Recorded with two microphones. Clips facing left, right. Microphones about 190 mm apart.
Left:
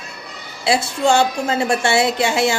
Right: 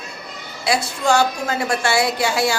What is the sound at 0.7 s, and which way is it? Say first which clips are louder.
A woman's voice: left 2 dB; 25° left (ahead or behind).